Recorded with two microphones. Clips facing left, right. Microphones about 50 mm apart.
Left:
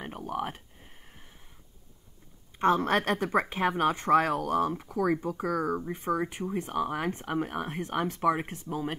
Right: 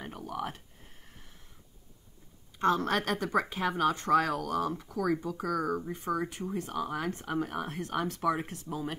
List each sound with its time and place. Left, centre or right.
0.0 s speech: left
2.6 s speech: left
5.6 s speech: centre
5.9 s speech: left